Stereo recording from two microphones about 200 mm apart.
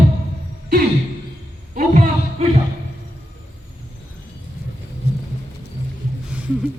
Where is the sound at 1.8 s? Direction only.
45° right (ahead or behind).